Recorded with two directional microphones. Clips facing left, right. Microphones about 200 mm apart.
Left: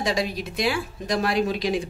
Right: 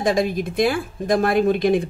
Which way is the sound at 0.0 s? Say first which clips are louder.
Right 6 dB; 50° right (ahead or behind).